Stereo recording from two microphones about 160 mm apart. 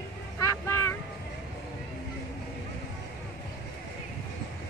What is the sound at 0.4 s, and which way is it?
Vehicle, 15° left (ahead or behind).